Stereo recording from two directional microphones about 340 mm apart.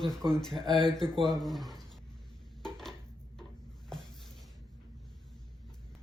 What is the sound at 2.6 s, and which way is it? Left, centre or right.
Dishes, centre.